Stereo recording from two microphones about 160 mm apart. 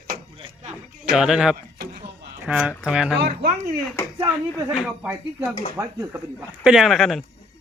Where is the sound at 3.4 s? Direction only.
50° right (ahead or behind).